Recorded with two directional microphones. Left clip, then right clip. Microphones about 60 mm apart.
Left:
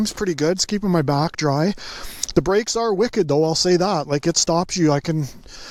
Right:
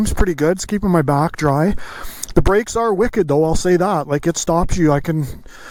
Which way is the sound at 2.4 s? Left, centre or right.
Right.